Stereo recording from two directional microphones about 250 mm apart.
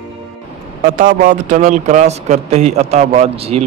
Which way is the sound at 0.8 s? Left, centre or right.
Right.